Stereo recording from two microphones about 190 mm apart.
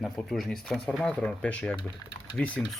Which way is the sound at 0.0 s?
Centre (ahead or behind).